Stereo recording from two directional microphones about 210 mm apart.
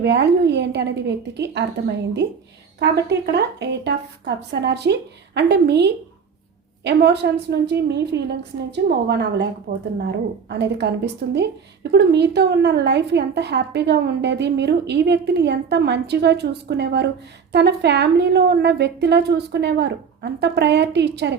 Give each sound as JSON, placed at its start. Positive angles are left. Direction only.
{"t": 0.0, "sound": "a woman's voice", "side_deg": -55}